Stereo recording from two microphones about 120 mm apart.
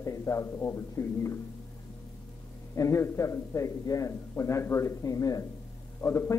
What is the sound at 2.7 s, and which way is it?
Speech, 25° left (ahead or behind).